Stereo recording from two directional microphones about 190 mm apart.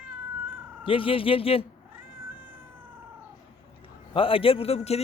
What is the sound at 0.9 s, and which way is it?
Speech, 25° left (ahead or behind).